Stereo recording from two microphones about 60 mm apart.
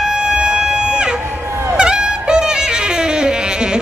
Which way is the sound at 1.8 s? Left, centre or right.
Centre.